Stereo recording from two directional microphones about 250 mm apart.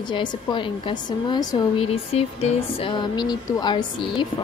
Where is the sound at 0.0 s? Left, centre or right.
Centre.